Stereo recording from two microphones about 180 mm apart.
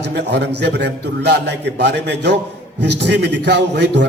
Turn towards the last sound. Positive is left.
turn(degrees=-70)  # may be behind; listen again after turning